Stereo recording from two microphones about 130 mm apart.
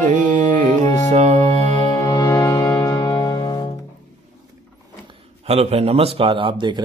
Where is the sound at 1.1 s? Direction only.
60° right (ahead or behind).